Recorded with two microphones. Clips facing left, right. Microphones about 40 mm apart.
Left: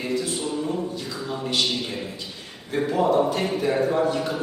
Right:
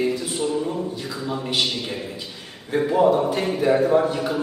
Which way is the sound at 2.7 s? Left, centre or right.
Centre.